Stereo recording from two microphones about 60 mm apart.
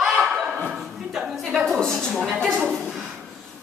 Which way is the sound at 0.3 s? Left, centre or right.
Centre.